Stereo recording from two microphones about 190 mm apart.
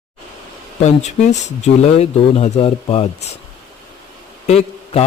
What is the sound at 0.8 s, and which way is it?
Speech, 35° left (ahead or behind).